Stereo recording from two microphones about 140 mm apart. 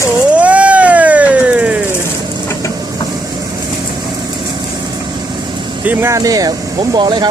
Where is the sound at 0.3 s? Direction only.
10° right (ahead or behind).